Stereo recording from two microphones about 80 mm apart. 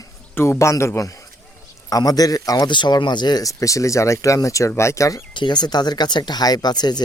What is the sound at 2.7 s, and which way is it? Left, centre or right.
Speech, left.